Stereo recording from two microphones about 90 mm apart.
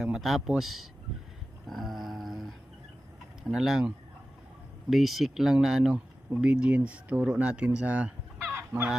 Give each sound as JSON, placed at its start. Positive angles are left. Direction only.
{"t": 0.0, "sound": "speech", "side_deg": -5}
{"t": 1.7, "sound": "a sound", "side_deg": 0}
{"t": 3.4, "sound": "speech", "side_deg": -5}
{"t": 8.5, "sound": "fowl", "side_deg": -25}